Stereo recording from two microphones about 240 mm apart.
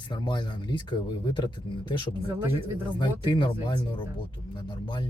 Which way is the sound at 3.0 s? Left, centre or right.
Centre.